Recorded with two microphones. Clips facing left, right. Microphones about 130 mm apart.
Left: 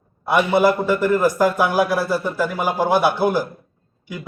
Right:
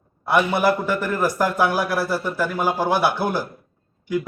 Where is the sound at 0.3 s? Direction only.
20° left (ahead or behind).